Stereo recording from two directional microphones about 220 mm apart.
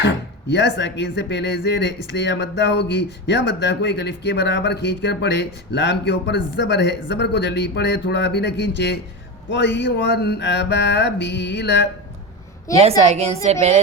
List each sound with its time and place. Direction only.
0.0 s speech: 50° left (ahead or behind)
13.0 s a woman's voice: 30° right (ahead or behind)
13.4 s music: 30° right (ahead or behind)